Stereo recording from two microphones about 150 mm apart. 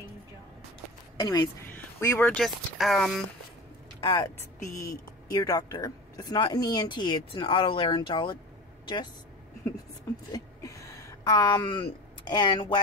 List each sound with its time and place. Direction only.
1.2 s speech: 25° left (ahead or behind)
1.8 s speech: 15° left (ahead or behind); by 3.2 s centre (ahead or behind)
4.0 s speech: 30° left (ahead or behind)
4.4 s speech: 15° left (ahead or behind)
10.3 s a sound: 20° left (ahead or behind)